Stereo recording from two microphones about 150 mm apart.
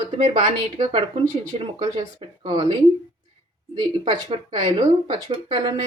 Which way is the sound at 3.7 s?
30° right (ahead or behind).